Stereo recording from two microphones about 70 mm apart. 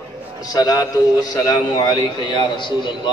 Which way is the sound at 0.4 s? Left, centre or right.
Left.